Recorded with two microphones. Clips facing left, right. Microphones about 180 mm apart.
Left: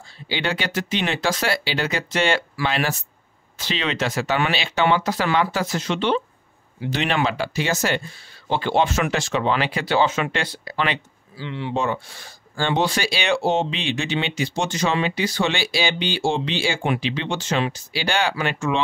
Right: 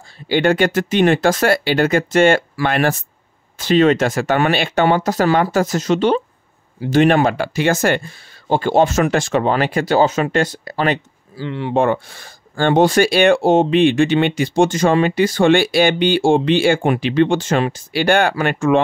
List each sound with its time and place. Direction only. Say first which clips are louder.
0.3 s speech: right 11 dB; 50° right (ahead or behind)